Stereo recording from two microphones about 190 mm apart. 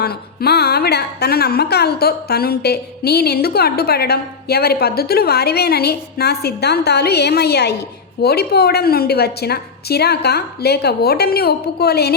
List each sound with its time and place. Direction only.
0.0 s speech: 55° left (ahead or behind)